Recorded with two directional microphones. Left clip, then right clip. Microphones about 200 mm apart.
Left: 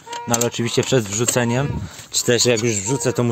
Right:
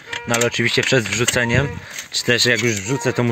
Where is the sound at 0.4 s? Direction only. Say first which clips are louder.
Right 6 dB; 5° left (ahead or behind).